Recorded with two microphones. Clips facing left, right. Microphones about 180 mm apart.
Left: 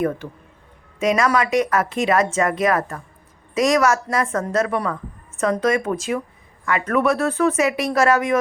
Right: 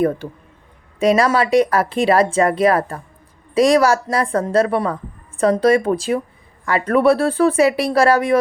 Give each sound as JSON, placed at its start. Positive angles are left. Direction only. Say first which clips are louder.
{"t": 0.9, "sound": "speech", "louder": "right 4 dB", "side_deg": -30}